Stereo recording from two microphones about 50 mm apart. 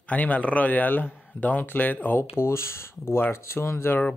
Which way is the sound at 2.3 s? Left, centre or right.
Left.